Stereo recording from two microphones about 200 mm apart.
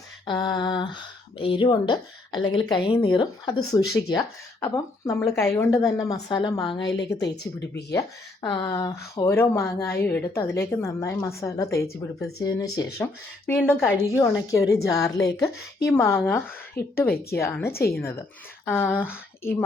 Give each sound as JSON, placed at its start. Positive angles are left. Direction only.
{"t": 0.3, "sound": "speech", "side_deg": 25}
{"t": 7.2, "sound": "speech", "side_deg": 60}
{"t": 7.9, "sound": "speech", "side_deg": 20}
{"t": 16.8, "sound": "a woman's voice", "side_deg": 50}
{"t": 17.3, "sound": "speech", "side_deg": 10}
{"t": 17.7, "sound": "a woman's voice", "side_deg": 50}
{"t": 18.0, "sound": "speech", "side_deg": 15}